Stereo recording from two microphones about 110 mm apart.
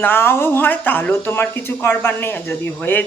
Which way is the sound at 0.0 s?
20° left (ahead or behind).